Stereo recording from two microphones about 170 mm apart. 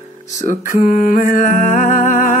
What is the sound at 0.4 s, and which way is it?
Music, 50° left (ahead or behind).